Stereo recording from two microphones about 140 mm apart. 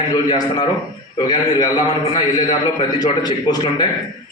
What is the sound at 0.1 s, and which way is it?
A man's voice, 30° left (ahead or behind).